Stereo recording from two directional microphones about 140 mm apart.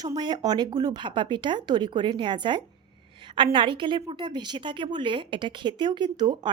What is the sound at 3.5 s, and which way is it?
A woman's voice, 35° right (ahead or behind).